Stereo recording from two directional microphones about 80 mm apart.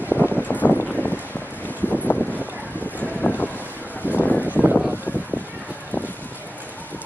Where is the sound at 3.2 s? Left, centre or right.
Left.